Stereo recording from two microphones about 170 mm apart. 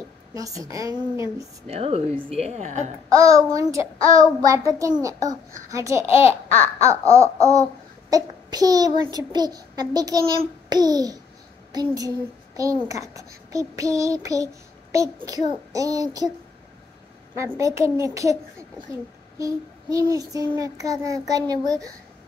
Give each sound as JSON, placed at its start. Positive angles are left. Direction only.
{"t": 0.3, "sound": "a child's voice", "side_deg": -20}
{"t": 1.7, "sound": "a woman's voice", "side_deg": -35}
{"t": 3.1, "sound": "a child's voice", "side_deg": -20}
{"t": 17.4, "sound": "a child's voice", "side_deg": -20}